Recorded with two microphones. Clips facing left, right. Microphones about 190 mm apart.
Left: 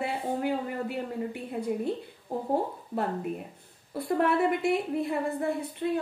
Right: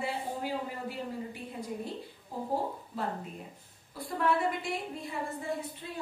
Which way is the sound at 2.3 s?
60° left (ahead or behind).